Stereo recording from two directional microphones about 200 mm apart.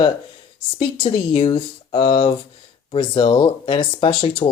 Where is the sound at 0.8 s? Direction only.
25° left (ahead or behind).